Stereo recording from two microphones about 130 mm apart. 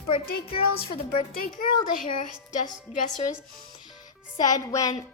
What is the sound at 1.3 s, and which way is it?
Speech, 90° left.